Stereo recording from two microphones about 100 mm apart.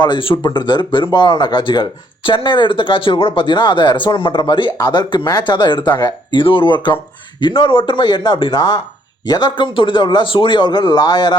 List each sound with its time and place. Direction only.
0.0 s speech: 50° left (ahead or behind)
6.4 s speech: 60° left (ahead or behind)